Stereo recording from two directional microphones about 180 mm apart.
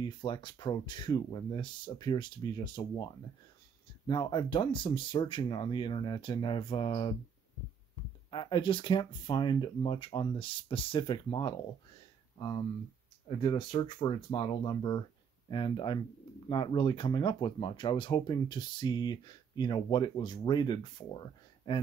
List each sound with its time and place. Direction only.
0.0 s speech: 25° left (ahead or behind)
4.1 s speech: 25° left (ahead or behind)
8.3 s speech: 25° left (ahead or behind)